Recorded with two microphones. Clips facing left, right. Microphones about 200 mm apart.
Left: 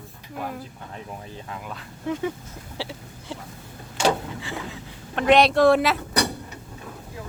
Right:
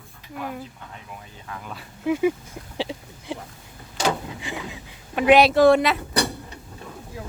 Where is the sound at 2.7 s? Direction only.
20° right (ahead or behind).